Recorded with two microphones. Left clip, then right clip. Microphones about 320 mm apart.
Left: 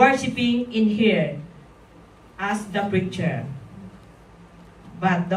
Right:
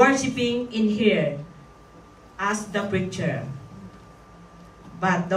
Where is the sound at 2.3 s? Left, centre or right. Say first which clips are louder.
Even; right.